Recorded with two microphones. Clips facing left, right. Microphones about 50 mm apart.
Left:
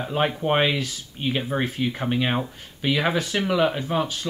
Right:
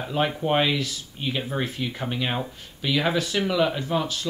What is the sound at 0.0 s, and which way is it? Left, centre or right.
Speech, left.